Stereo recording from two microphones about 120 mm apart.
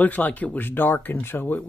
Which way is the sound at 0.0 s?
15° left (ahead or behind).